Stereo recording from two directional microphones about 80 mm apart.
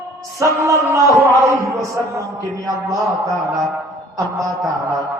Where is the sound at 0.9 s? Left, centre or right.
Right.